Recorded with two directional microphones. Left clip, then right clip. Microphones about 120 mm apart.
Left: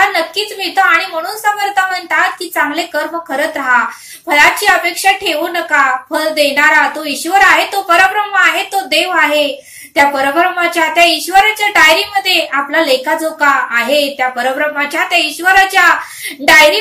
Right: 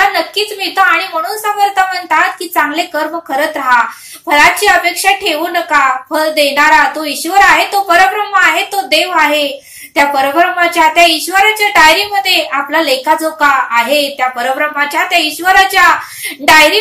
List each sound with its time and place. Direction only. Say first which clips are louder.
0.1 s a woman's voice: right 1 dB; 15° right (ahead or behind)